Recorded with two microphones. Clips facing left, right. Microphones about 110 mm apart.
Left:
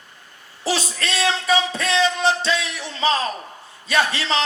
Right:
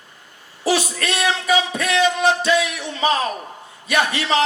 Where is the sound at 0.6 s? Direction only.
30° left (ahead or behind).